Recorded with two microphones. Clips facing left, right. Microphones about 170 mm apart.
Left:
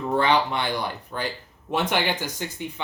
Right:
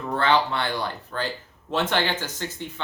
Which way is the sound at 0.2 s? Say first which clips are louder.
Right 1 dB; 15° left (ahead or behind).